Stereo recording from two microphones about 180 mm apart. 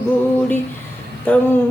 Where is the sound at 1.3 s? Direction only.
10° left (ahead or behind).